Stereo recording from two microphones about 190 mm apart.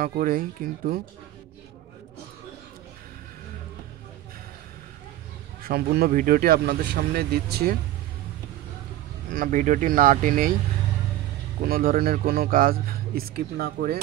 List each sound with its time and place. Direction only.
0.0 s a man's voice: 50° right (ahead or behind)
5.6 s a man's voice: 50° right (ahead or behind)
9.3 s a man's voice: 45° right (ahead or behind)
11.6 s a man's voice: 50° right (ahead or behind)